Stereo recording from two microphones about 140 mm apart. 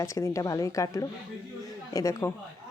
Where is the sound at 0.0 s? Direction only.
20° left (ahead or behind).